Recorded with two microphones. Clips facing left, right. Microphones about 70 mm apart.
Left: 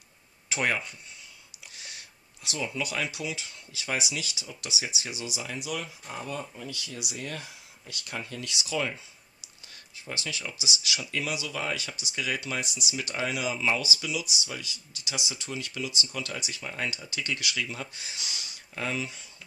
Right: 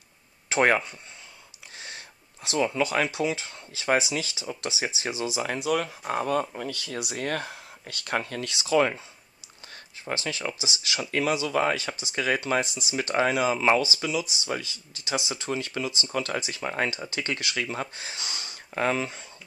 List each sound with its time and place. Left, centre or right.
0.5 s speech: right
1.8 s a sound: right
2.8 s speech: right
5.4 s speech: right
8.5 s speech: right
10.1 s speech: right